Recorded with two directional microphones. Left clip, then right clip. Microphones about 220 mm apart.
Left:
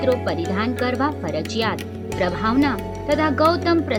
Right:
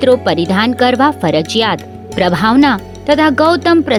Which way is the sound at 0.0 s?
45° right (ahead or behind).